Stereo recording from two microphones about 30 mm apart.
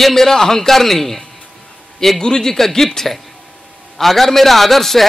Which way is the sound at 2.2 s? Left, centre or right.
Left.